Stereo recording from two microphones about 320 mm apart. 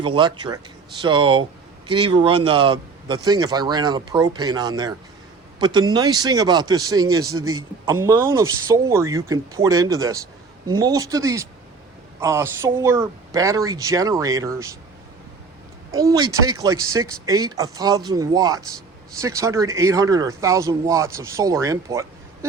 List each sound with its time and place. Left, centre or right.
0.0 s speech: centre
16.0 s speech: centre